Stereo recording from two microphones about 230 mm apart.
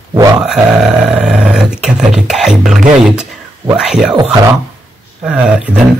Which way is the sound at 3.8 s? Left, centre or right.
Centre.